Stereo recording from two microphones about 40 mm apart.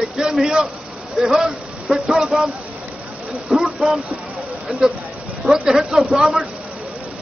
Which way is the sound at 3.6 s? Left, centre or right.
Centre.